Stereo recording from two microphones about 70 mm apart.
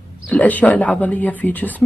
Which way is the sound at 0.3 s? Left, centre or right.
Left.